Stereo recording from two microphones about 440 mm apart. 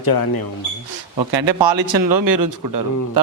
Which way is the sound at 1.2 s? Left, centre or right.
Right.